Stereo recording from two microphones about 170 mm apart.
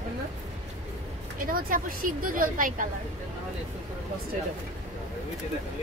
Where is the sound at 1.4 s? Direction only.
55° right (ahead or behind).